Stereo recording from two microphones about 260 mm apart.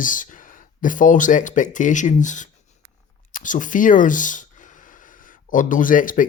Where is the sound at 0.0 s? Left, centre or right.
Left.